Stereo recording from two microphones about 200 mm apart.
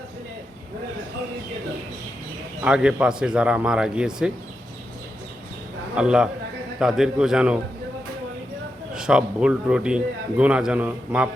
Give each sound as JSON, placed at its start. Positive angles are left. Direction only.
{"t": 2.6, "sound": "speech", "side_deg": -5}
{"t": 6.0, "sound": "speech", "side_deg": -5}
{"t": 9.0, "sound": "speech", "side_deg": -5}